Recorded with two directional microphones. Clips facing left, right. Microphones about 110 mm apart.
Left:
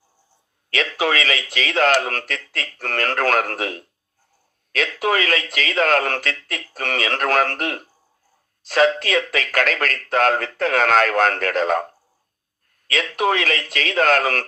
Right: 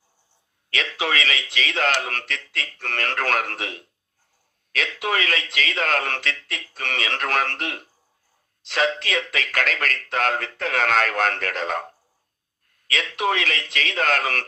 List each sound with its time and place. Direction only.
0.7 s a man's voice: 40° left (ahead or behind)
12.9 s speech: 40° left (ahead or behind)